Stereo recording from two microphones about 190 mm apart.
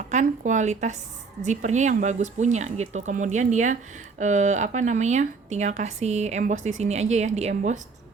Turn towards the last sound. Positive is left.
turn(degrees=-35)  # may be behind; listen again after turning